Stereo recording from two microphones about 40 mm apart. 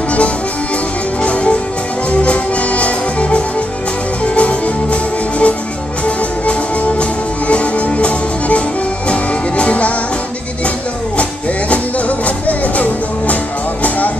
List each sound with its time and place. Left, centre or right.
1.2 s music: left
11.7 s music: left